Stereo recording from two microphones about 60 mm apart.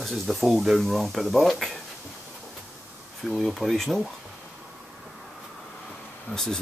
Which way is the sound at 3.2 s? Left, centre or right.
Centre.